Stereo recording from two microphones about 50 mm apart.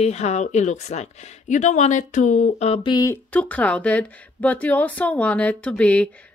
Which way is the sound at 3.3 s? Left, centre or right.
Left.